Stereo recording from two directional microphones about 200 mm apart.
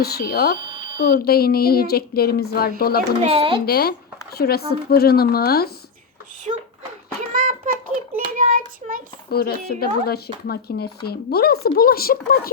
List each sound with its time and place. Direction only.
0.0 s speech: 50° left (ahead or behind)
0.6 s smoke detector: 20° right (ahead or behind)
0.9 s speech: 45° left (ahead or behind)
3.2 s a child's voice: 30° right (ahead or behind)
3.7 s speech: 50° left (ahead or behind)
6.5 s a sound: 30° right (ahead or behind)
8.4 s child singing: 40° right (ahead or behind)
9.3 s speech: 50° left (ahead or behind)